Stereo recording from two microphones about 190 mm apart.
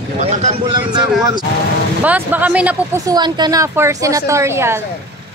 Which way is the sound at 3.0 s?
20° right (ahead or behind).